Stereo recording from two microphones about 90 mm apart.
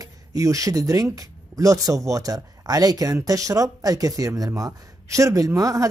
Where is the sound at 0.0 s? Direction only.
40° right (ahead or behind).